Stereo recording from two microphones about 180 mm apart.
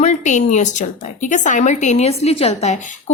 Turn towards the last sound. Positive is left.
turn(degrees=40)  # may be behind; listen again after turning